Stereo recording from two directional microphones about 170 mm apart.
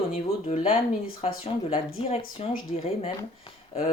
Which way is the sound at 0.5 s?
40° left (ahead or behind).